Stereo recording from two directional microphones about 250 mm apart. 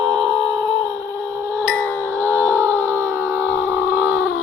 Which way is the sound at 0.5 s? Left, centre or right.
Centre.